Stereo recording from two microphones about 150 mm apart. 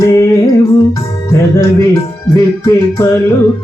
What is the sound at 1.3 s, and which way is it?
Music, 20° left (ahead or behind).